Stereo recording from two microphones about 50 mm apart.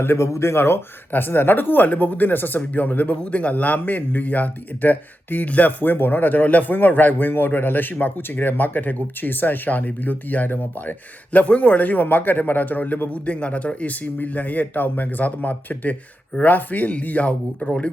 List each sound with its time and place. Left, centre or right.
0.0 s speech: left
0.3 s speech: left
1.1 s a man's voice: left
3.2 s a man's voice: left